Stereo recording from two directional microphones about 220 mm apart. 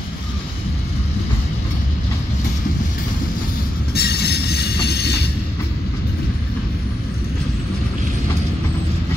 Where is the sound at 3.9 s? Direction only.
45° left (ahead or behind).